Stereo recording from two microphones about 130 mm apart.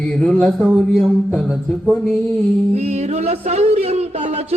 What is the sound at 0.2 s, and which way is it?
Mantra, 5° left (ahead or behind).